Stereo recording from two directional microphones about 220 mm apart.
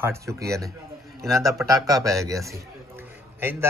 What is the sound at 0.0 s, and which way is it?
A man's voice, 10° right (ahead or behind).